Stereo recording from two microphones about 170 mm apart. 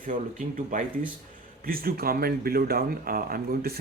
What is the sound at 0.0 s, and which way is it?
Speech, 50° right (ahead or behind).